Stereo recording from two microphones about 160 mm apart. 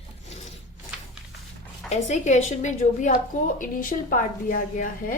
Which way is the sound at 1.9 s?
45° left (ahead or behind).